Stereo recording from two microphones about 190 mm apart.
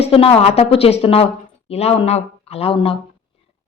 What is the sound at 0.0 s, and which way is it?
A woman's voice, 30° left (ahead or behind).